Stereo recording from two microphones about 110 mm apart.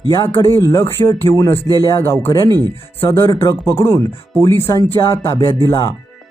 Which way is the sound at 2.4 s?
40° right (ahead or behind).